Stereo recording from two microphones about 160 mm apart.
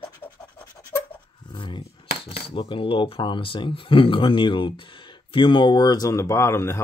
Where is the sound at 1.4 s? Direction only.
30° left (ahead or behind).